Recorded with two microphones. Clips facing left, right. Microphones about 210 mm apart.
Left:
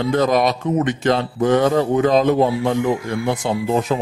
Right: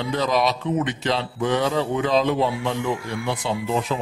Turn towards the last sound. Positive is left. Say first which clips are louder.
# left 5 dB
turn(degrees=45)  # may be behind; listen again after turning